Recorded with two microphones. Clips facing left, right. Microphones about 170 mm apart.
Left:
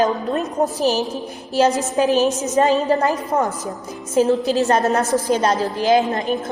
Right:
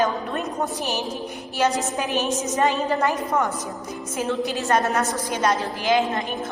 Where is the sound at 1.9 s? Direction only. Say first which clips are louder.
Left 8 dB; 35° left (ahead or behind).